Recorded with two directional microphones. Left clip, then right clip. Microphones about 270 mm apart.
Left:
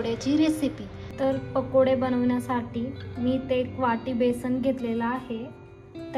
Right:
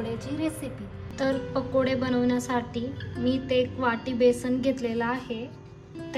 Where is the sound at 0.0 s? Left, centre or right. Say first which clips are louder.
Left 7 dB; left.